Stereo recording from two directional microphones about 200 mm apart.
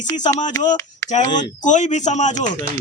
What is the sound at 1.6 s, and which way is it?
Speech, 35° left (ahead or behind).